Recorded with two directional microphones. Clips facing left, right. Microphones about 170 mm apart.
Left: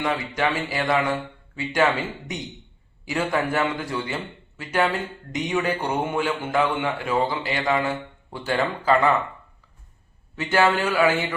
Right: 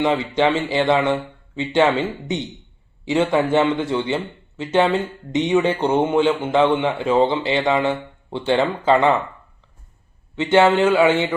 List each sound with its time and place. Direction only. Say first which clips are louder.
0.0 s speech: right 6 dB; 25° right (ahead or behind)
10.3 s speech: right 6 dB; 25° right (ahead or behind)